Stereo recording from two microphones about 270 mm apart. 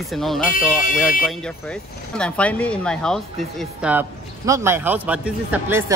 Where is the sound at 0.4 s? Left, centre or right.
Left.